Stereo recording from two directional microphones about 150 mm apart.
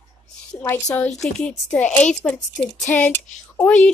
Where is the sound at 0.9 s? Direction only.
5° left (ahead or behind).